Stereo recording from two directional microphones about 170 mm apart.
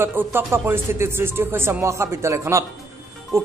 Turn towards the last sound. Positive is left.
turn(degrees=-20)  # may be behind; listen again after turning